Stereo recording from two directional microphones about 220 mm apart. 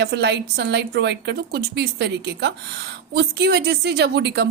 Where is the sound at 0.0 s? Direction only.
50° right (ahead or behind).